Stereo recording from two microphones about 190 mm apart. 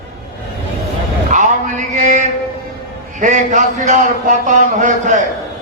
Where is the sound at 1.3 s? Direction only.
40° right (ahead or behind).